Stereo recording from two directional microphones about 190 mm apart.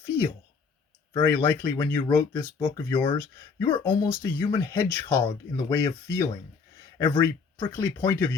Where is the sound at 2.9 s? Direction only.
25° left (ahead or behind).